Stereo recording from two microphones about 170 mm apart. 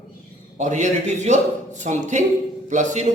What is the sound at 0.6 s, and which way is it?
Speech, 45° right (ahead or behind).